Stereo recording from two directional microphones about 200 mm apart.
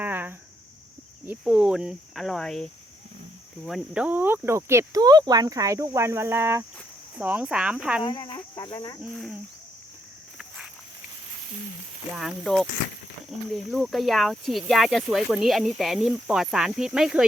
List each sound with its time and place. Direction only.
0.0 s cricket: 10° right (ahead or behind)
1.3 s speech: 5° right (ahead or behind)
3.7 s speech: 5° right (ahead or behind)
8.0 s speech: 20° left (ahead or behind)
9.0 s speech: centre (ahead or behind)
12.1 s speech: centre (ahead or behind)